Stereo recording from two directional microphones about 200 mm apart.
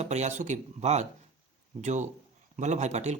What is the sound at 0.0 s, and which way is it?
Speech, 35° right (ahead or behind).